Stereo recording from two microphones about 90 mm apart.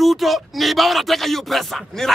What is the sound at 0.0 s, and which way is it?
Speech, centre (ahead or behind).